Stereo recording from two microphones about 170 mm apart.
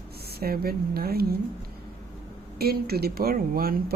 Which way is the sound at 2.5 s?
65° right (ahead or behind).